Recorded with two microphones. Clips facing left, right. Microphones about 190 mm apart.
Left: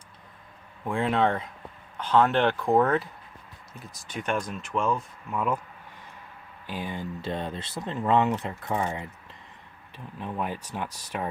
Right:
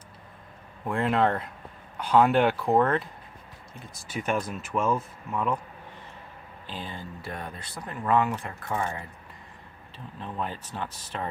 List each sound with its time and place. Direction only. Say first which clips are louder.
0.9 s speech: even; centre (ahead or behind)
6.7 s speech: left 5 dB; 15° left (ahead or behind)
10.2 s speech: left 2 dB; 10° left (ahead or behind)